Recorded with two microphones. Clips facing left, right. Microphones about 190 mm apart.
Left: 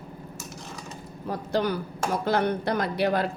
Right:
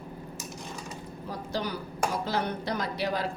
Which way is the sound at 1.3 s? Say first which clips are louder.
Left 7 dB; 60° left (ahead or behind).